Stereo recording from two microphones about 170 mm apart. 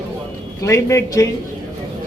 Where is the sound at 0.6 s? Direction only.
15° left (ahead or behind).